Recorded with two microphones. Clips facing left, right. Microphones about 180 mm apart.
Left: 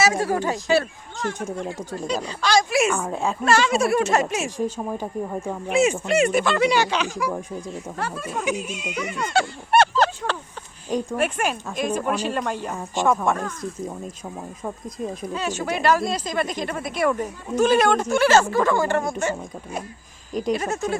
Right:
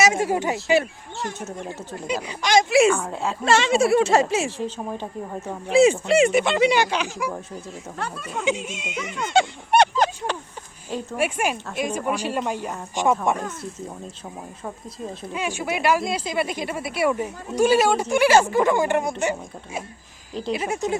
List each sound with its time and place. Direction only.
0.0 s speech: 15° right (ahead or behind)
1.4 s speech: 10° left (ahead or behind)
2.0 s speech: 15° right (ahead or behind)
2.9 s speech: 10° left (ahead or behind)
3.4 s speech: 25° right (ahead or behind)
4.4 s speech: 10° left (ahead or behind)
5.6 s speech: 30° right (ahead or behind)
6.7 s speech: 10° right (ahead or behind)
8.4 s speech: 25° right (ahead or behind)
15.3 s speech: 10° right (ahead or behind)